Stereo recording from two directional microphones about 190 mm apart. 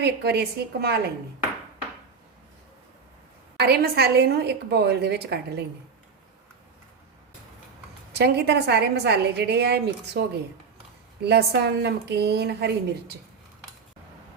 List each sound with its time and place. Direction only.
0.0 s a woman's voice: 60° right (ahead or behind)
3.6 s a woman's voice: 55° right (ahead or behind)
8.1 s a woman's voice: 60° right (ahead or behind)